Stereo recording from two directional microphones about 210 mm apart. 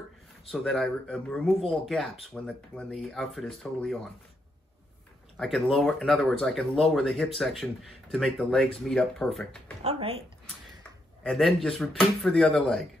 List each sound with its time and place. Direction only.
0.5 s speech: centre (ahead or behind)
5.4 s speech: centre (ahead or behind)
9.8 s speech: 30° right (ahead or behind)
11.2 s speech: centre (ahead or behind)